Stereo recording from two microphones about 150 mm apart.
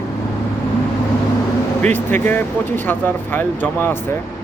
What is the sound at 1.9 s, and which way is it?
Speech, 15° left (ahead or behind).